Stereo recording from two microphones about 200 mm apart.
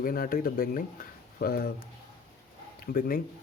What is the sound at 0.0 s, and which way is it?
Speech, 45° left (ahead or behind).